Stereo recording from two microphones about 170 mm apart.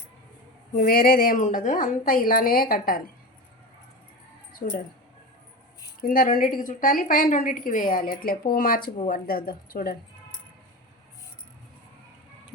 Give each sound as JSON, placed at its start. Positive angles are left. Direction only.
{"t": 0.8, "sound": "a woman's voice", "side_deg": 60}
{"t": 4.6, "sound": "a woman's voice", "side_deg": 55}
{"t": 6.0, "sound": "a woman's voice", "side_deg": 55}